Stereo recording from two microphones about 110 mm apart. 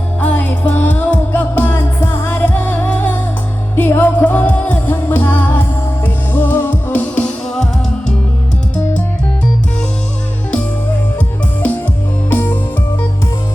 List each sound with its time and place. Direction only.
0.2 s music: 15° left (ahead or behind)
12.3 s music: 20° left (ahead or behind)